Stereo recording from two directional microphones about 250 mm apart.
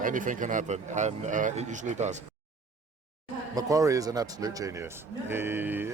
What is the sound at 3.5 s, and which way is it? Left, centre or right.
Speech, centre.